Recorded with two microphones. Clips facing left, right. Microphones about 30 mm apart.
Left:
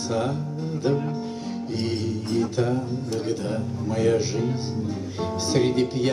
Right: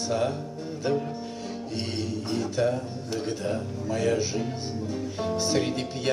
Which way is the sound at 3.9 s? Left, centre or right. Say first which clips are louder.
Left 4 dB; centre.